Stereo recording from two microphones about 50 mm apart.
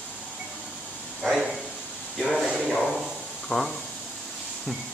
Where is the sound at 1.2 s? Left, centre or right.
Centre.